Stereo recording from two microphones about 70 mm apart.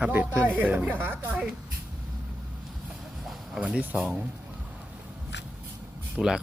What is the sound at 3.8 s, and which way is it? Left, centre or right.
Speech, right.